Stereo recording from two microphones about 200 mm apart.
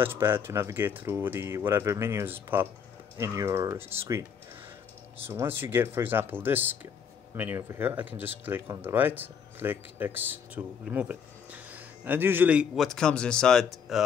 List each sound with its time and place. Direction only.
0.0 s speech: 10° right (ahead or behind)